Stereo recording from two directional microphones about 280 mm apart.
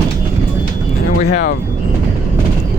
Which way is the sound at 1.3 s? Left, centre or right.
Left.